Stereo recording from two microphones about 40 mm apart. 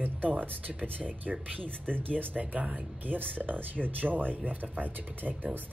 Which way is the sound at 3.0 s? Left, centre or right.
Right.